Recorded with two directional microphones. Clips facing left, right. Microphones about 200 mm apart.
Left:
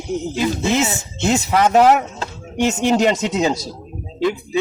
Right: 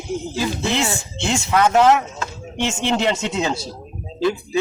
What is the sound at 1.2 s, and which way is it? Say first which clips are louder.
Speech: left 2 dB; 40° left (ahead or behind).